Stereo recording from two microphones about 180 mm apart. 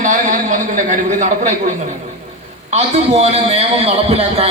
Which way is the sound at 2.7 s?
35° right (ahead or behind).